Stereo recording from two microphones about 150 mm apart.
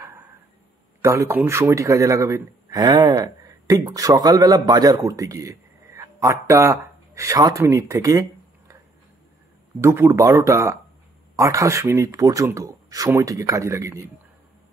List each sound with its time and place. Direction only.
1.0 s speech: 20° right (ahead or behind)
9.8 s speech: 15° right (ahead or behind)